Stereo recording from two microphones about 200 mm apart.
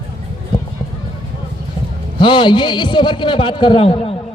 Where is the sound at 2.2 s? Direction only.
25° left (ahead or behind).